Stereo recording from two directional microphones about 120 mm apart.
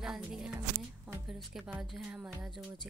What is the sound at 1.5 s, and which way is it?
Speech, 5° right (ahead or behind).